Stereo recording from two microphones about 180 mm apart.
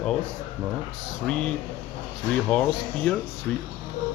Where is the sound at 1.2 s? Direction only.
5° left (ahead or behind).